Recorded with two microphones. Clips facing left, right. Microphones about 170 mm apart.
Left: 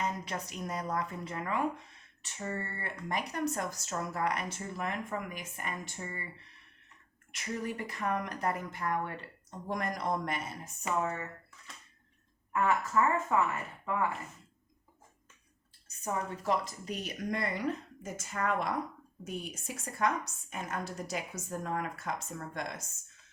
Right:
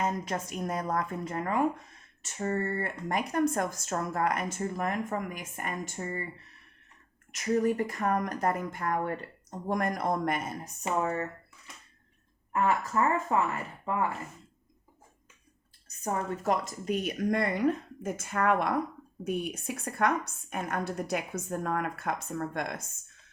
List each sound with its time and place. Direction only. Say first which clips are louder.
0.0 s speech: right 5 dB; 45° right (ahead or behind)
7.3 s speech: right 10 dB; 45° right (ahead or behind)
10.8 s speech: right 4 dB; 35° right (ahead or behind)
12.6 s speech: right 1 dB; 35° right (ahead or behind)
16.0 s a woman's voice: right 3 dB; 45° right (ahead or behind)